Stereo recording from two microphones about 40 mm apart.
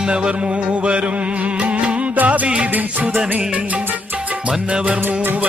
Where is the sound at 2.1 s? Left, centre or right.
Right.